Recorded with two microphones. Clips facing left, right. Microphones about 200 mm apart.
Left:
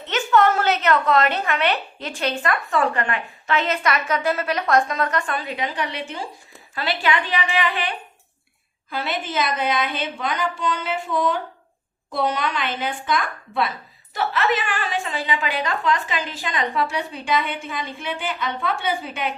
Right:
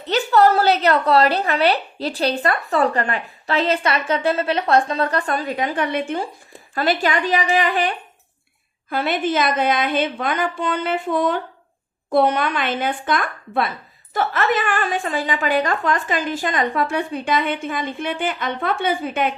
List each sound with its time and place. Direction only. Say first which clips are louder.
0.0 s a woman's voice: right 3 dB; 35° right (ahead or behind); by 19.3 s 50° right (ahead or behind)